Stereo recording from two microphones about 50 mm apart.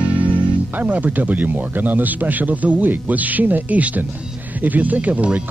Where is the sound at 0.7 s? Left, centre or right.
Right.